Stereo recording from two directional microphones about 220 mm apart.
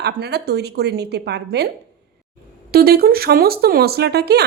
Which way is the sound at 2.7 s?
45° right (ahead or behind).